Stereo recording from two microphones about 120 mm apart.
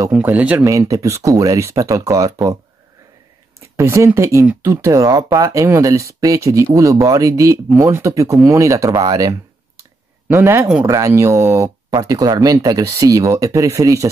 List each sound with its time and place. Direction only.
0.1 s speech: 10° right (ahead or behind)
0.7 s speech: 25° right (ahead or behind)
3.7 s speech: 25° right (ahead or behind)